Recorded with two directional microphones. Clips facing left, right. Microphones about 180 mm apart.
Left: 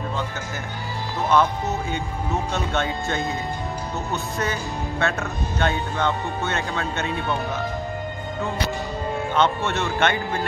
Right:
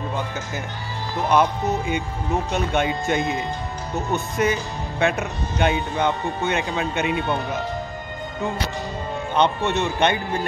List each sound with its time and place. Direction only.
1.3 s speech: 15° right (ahead or behind)
9.7 s speech: 15° right (ahead or behind)